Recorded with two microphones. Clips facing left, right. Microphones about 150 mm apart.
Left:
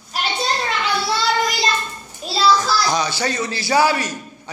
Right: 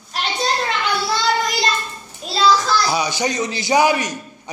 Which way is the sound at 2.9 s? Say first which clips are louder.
Right 1 dB; 15° right (ahead or behind).